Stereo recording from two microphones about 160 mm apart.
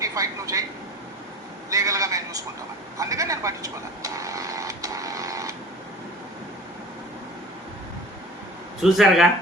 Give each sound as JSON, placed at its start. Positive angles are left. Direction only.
{"t": 0.0, "sound": "speech", "side_deg": -20}
{"t": 1.7, "sound": "a man's voice", "side_deg": -20}
{"t": 3.0, "sound": "a sound", "side_deg": -20}
{"t": 8.8, "sound": "speech", "side_deg": 0}